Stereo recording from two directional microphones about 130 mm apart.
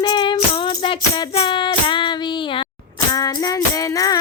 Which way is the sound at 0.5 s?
40° left (ahead or behind).